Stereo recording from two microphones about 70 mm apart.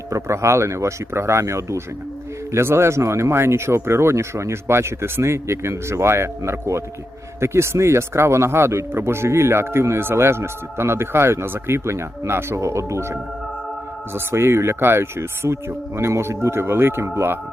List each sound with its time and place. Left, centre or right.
0.1 s speech: right